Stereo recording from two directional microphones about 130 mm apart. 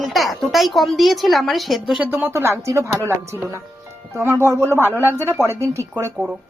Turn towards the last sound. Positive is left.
turn(degrees=-20)  # may be behind; listen again after turning